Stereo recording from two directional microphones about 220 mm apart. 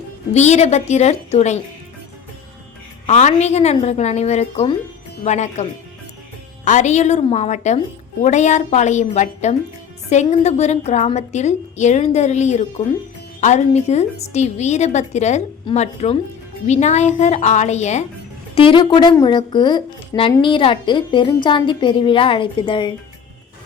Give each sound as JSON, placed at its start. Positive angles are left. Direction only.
{"t": 0.3, "sound": "a woman's voice", "side_deg": 30}
{"t": 3.1, "sound": "a woman's voice", "side_deg": 30}
{"t": 6.7, "sound": "a woman's voice", "side_deg": 35}